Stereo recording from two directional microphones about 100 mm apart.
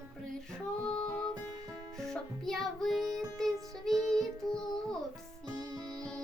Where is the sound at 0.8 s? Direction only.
10° left (ahead or behind).